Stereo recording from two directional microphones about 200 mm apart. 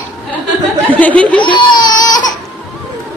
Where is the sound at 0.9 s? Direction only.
5° left (ahead or behind).